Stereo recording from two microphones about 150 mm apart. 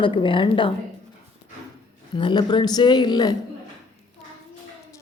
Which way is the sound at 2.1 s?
30° left (ahead or behind).